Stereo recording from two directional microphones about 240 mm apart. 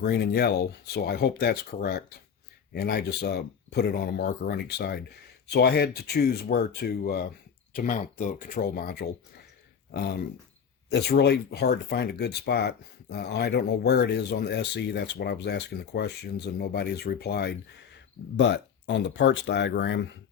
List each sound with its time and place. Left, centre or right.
0.0 s speech: left
10.8 s speech: left